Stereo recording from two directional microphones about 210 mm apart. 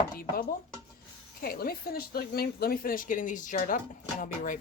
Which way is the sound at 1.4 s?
45° left (ahead or behind).